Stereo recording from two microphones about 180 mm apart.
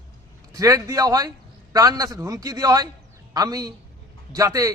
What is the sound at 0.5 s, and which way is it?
A man's voice, 20° right (ahead or behind).